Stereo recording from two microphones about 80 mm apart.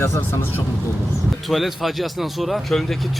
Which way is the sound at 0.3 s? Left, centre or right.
Left.